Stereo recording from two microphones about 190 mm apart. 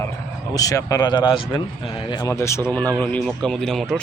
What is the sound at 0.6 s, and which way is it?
Speech, 20° left (ahead or behind).